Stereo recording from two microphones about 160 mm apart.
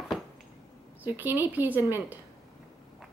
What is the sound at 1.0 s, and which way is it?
Speech, 10° right (ahead or behind).